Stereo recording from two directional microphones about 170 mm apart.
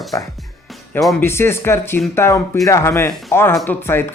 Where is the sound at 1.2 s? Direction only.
15° left (ahead or behind).